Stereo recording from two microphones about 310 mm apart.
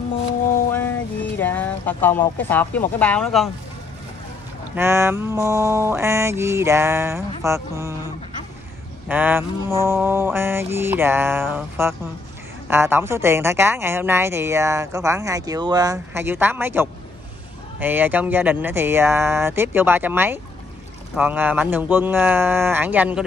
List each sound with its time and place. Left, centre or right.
0.7 s music: centre
1.4 s speech: centre
4.7 s a woman's voice: centre
9.1 s a woman's voice: centre